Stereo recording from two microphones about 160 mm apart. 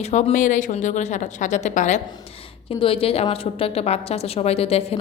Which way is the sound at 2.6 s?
35° left (ahead or behind).